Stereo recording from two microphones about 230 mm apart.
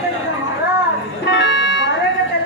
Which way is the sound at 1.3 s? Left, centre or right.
Left.